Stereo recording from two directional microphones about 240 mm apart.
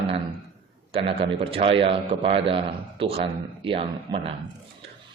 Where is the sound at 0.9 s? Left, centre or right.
Right.